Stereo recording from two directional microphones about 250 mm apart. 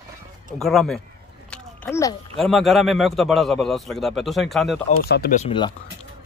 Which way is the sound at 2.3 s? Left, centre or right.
Centre.